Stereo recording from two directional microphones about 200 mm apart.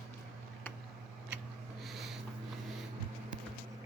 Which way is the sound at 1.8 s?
Centre (ahead or behind).